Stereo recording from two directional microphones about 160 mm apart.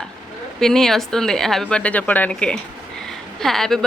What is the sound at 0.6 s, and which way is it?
A woman's voice, 5° left (ahead or behind).